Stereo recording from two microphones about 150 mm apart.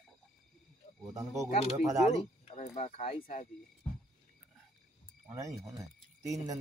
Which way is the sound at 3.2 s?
55° left (ahead or behind).